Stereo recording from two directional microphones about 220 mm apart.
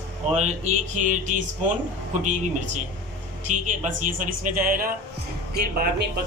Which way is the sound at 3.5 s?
35° right (ahead or behind).